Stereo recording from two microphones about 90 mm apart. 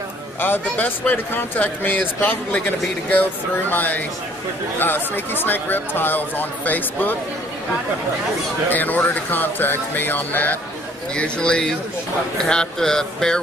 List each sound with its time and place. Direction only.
0.4 s speech: 20° left (ahead or behind)
8.6 s speech: 20° left (ahead or behind)